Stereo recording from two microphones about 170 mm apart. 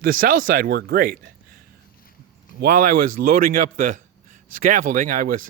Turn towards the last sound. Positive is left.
turn(degrees=-55)  # may be behind; listen again after turning